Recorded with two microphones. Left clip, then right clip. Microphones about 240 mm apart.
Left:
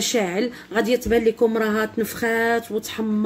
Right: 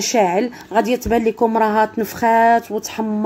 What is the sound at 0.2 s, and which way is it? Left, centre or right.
Speech, right.